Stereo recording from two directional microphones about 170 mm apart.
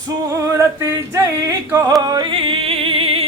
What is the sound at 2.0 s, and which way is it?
Music, 25° right (ahead or behind).